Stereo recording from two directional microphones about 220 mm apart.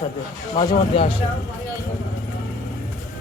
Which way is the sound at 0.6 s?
20° left (ahead or behind).